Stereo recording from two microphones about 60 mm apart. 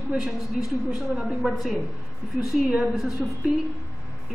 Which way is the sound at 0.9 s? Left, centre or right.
Centre.